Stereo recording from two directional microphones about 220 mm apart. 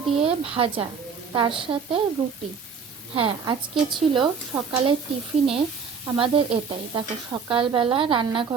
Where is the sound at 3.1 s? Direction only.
20° right (ahead or behind).